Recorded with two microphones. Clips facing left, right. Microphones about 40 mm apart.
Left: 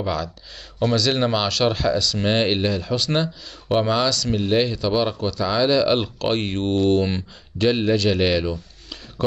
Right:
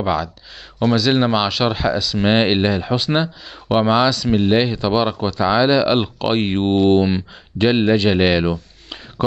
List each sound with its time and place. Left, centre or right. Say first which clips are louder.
0.0 s speech: right 5 dB; centre
7.1 s speech: right 6 dB; centre
7.6 s speech: right 4 dB; right